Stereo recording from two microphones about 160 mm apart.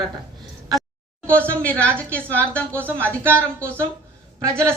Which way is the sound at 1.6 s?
10° left (ahead or behind).